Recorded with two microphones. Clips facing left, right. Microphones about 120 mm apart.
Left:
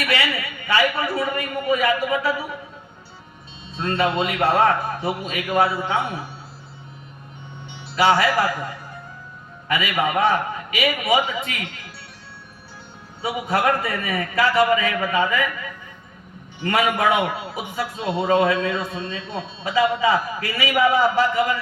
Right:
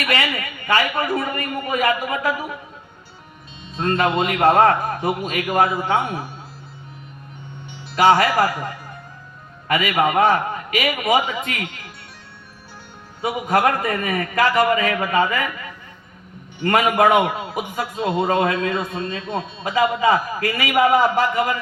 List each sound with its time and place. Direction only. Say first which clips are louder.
0.0 s a man's voice: right 1 dB; 45° right (ahead or behind)
3.8 s a man's voice: right 2 dB; 40° right (ahead or behind)
7.9 s a man's voice: right 3 dB; 45° right (ahead or behind)
13.2 s a man's voice: right 2 dB; 45° right (ahead or behind)
16.6 s a man's voice: right 4 dB; 45° right (ahead or behind)